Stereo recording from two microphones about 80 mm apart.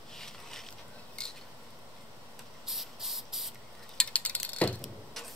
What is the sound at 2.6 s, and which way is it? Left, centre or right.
Spray, centre.